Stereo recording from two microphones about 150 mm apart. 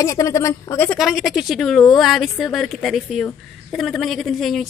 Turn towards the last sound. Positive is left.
turn(degrees=0)  # may be behind; listen again after turning